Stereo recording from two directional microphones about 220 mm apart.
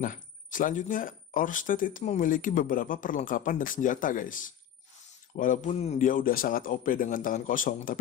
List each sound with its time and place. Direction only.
0.0 s speech: 35° left (ahead or behind)